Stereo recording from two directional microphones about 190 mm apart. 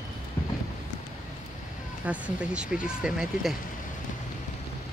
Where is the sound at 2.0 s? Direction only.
5° right (ahead or behind).